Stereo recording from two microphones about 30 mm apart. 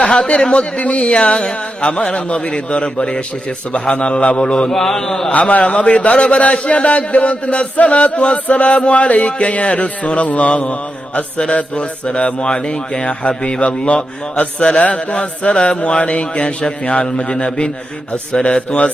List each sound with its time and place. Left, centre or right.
0.0 s a man's voice: left
0.8 s a sound: left
1.5 s speech: left
4.4 s mantra: left
4.7 s a man's voice: centre
5.3 s a sound: left
10.5 s mantra: left
11.7 s speech: left